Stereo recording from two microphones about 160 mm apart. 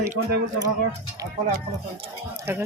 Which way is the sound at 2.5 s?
15° right (ahead or behind).